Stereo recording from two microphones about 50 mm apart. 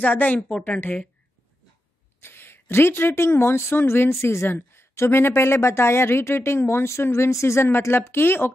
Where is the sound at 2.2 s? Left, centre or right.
Left.